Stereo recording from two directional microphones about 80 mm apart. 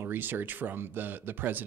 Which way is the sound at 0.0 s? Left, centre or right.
Right.